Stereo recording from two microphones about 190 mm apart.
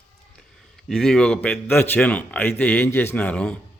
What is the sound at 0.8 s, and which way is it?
A man's voice, centre (ahead or behind).